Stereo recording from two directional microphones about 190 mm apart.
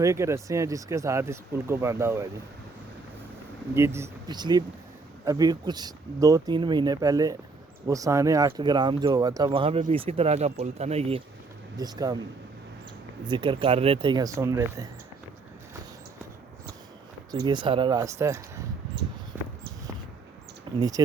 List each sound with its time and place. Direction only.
0.0 s speech: 15° right (ahead or behind)
3.8 s speech: 15° right (ahead or behind); by 11.2 s 30° right (ahead or behind)
11.8 s speech: 20° right (ahead or behind)
13.2 s speech: 25° right (ahead or behind)
17.4 s speech: 25° right (ahead or behind)
20.7 s speech: 20° right (ahead or behind)